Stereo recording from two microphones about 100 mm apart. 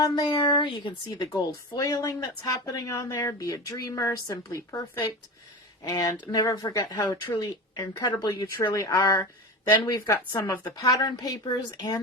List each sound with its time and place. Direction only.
0.0 s speech: 40° left (ahead or behind)
0.3 s speech: 55° left (ahead or behind)
1.3 s speech: 35° left (ahead or behind)
5.8 s speech: 40° left (ahead or behind)